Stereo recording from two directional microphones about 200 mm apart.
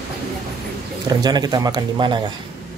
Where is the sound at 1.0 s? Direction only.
20° right (ahead or behind).